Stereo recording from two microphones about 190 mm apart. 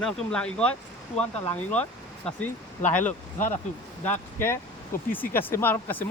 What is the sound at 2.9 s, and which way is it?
Speech, 10° left (ahead or behind).